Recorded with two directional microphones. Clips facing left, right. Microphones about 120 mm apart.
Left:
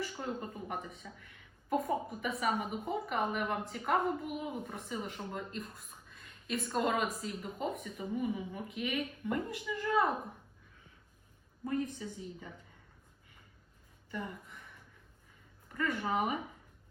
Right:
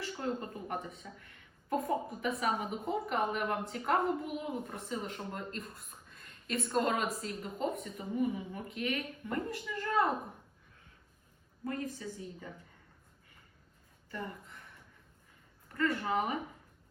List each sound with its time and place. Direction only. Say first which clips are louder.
0.0 s a sound: right 2 dB; 5° left (ahead or behind)
1.7 s a woman's voice: even; 5° left (ahead or behind)
11.6 s a woman's voice: left 2 dB; 15° left (ahead or behind)
14.1 s a woman's voice: left 1 dB; 10° left (ahead or behind)
15.7 s a woman's voice: right 2 dB; 10° left (ahead or behind)